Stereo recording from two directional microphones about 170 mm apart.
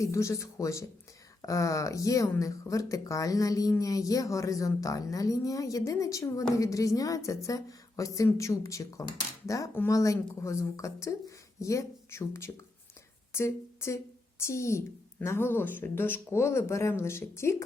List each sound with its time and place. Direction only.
0.0 s speech: 15° left (ahead or behind)